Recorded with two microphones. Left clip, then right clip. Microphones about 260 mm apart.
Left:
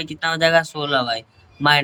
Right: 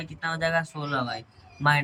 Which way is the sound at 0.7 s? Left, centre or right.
Left.